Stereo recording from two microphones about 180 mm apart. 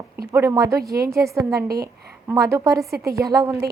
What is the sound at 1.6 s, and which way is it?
Speech, 60° right (ahead or behind).